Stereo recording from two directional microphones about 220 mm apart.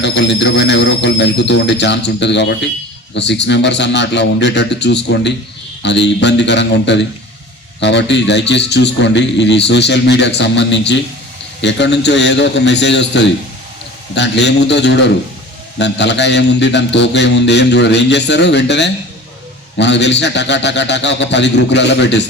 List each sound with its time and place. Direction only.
0.0 s a man's voice: 55° left (ahead or behind)